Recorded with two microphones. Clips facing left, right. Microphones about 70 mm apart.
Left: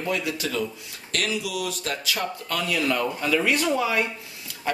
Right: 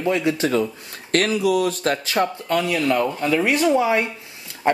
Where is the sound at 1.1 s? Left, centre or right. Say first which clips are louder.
Right 9 dB; right.